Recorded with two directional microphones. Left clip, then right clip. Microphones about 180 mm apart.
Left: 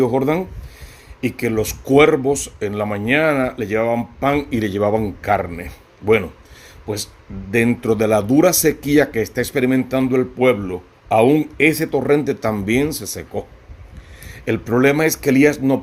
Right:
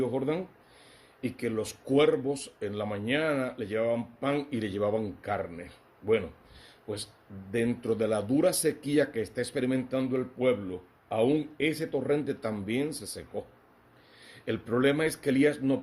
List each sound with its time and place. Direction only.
0.0 s speech: 45° left (ahead or behind)